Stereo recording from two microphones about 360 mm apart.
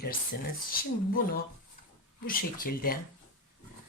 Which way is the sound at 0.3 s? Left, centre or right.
Left.